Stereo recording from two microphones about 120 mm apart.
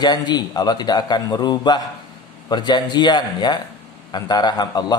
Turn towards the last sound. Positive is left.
turn(degrees=35)  # may be behind; listen again after turning